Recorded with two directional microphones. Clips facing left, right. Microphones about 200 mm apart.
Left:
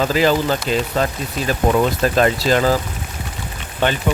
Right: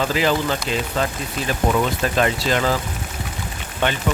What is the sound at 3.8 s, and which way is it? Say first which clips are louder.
Speech: left 3 dB; 35° left (ahead or behind).